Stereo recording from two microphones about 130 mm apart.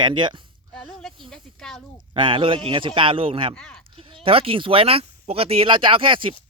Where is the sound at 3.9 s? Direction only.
45° right (ahead or behind).